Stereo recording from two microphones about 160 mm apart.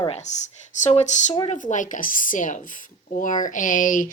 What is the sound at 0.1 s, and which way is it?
Speech, 45° left (ahead or behind).